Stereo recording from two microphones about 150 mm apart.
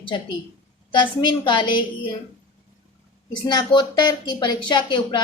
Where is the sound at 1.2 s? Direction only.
30° left (ahead or behind).